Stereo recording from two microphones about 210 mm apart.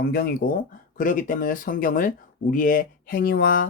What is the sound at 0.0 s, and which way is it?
Speech, 45° left (ahead or behind).